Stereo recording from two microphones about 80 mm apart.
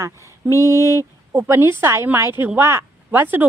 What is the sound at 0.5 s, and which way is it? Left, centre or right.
Speech, left.